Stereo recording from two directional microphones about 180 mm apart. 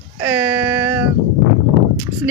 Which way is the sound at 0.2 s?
10° right (ahead or behind).